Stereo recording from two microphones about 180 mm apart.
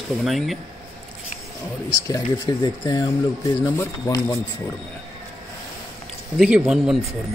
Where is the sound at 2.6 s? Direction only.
25° left (ahead or behind).